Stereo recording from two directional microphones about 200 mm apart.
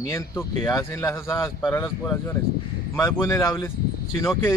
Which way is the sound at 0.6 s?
15° left (ahead or behind).